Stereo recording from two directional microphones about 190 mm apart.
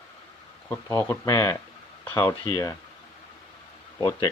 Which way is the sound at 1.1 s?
15° left (ahead or behind).